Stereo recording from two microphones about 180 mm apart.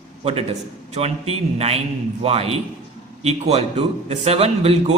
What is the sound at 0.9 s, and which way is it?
A man's voice, 35° right (ahead or behind).